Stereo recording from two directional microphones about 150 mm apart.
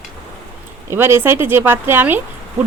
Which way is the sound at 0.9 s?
15° right (ahead or behind).